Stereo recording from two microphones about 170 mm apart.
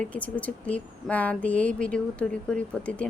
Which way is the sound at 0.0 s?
10° left (ahead or behind).